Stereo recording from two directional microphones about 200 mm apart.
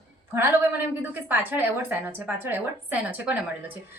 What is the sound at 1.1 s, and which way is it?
A woman's voice, 10° right (ahead or behind).